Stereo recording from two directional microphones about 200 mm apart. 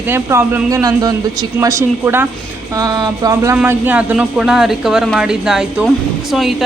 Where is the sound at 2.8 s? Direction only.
20° right (ahead or behind).